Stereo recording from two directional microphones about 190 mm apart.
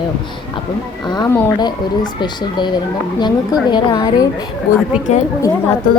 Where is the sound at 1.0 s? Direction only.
20° left (ahead or behind).